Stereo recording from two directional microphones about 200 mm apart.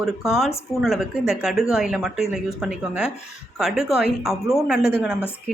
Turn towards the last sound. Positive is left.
turn(degrees=-5)  # may be behind; listen again after turning